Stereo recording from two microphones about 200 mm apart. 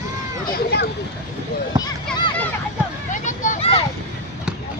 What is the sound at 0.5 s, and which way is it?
Speech, 55° left (ahead or behind).